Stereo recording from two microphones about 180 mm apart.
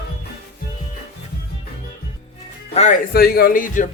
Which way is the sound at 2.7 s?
40° left (ahead or behind).